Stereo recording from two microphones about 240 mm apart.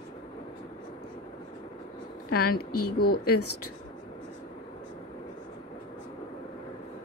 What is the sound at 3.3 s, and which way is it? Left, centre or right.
Speech, left.